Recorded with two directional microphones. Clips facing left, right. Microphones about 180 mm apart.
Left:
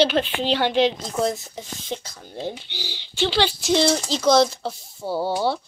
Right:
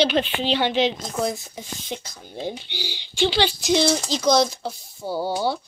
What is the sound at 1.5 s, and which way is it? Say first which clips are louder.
Speech: left 1 dB; 5° right (ahead or behind).